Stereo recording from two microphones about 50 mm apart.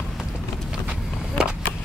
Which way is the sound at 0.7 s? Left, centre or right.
Right.